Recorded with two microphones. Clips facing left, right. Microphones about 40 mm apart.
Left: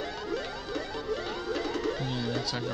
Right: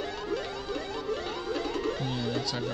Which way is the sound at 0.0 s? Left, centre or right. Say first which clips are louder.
Right 1 dB; right.